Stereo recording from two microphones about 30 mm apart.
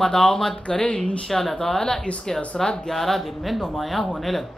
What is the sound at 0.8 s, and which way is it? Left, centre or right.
Speech, left.